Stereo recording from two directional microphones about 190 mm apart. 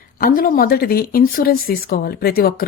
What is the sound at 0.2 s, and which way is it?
Speech, 50° left (ahead or behind).